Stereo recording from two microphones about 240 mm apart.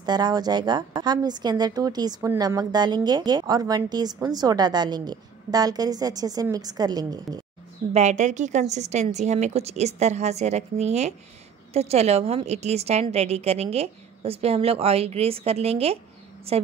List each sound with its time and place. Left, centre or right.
0.0 s speech: centre
7.9 s a woman's voice: right